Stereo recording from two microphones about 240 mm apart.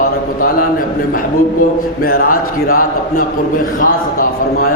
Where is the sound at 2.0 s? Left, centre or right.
Left.